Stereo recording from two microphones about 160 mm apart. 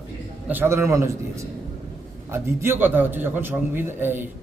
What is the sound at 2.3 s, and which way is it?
A man's voice, 15° right (ahead or behind).